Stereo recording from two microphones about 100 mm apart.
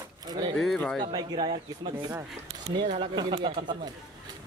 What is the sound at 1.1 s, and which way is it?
Speech, 45° right (ahead or behind).